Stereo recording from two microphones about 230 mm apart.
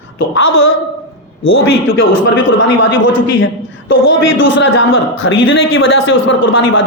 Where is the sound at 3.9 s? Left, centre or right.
Left.